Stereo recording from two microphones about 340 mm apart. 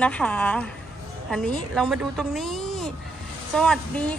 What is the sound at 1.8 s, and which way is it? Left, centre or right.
Speech, centre.